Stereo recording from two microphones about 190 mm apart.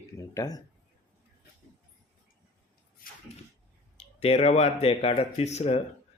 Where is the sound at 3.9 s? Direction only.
35° left (ahead or behind).